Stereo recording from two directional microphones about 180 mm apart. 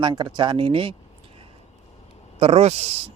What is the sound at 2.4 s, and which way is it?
Speech, 35° right (ahead or behind).